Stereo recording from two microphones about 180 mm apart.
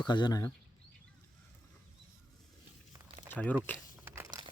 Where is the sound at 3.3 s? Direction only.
10° left (ahead or behind).